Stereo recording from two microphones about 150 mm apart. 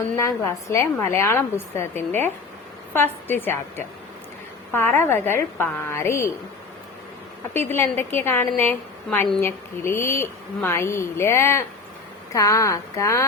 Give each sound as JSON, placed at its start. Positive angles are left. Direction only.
{"t": 0.2, "sound": "speech", "side_deg": 20}
{"t": 7.5, "sound": "a woman's voice", "side_deg": 15}